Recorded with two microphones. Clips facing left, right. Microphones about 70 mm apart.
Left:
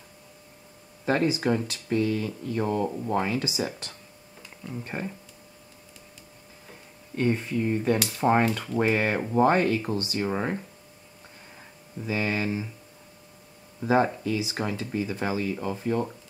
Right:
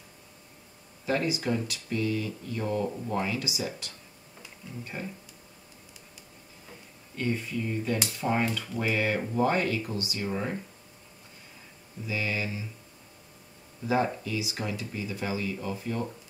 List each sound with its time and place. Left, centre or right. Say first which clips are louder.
1.0 s speech: left 4 dB; left
7.2 s speech: left 5 dB; left
12.1 s speech: left 5 dB; left
13.8 s speech: left 4 dB; left